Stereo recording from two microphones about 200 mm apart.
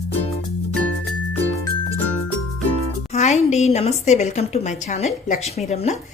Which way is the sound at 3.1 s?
35° left (ahead or behind).